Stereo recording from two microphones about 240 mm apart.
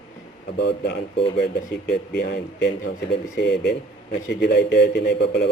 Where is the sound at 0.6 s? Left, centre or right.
Left.